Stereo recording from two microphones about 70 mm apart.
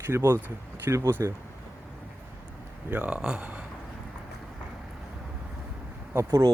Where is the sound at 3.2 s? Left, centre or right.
Centre.